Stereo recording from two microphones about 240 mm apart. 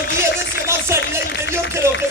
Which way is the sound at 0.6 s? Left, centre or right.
Centre.